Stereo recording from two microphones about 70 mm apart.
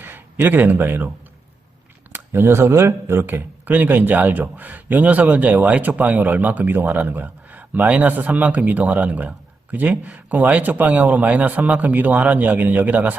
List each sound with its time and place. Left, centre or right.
0.0 s a man's voice: right
2.1 s speech: right